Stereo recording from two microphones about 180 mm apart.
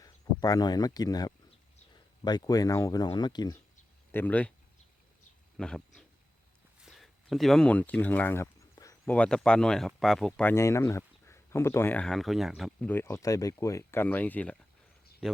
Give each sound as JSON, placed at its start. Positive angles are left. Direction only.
{"t": 0.0, "sound": "speech", "side_deg": 20}
{"t": 4.1, "sound": "speech", "side_deg": 10}
{"t": 5.5, "sound": "speech", "side_deg": 5}
{"t": 6.8, "sound": "a sound", "side_deg": 0}
{"t": 9.0, "sound": "speech", "side_deg": 5}
{"t": 12.9, "sound": "speech", "side_deg": 15}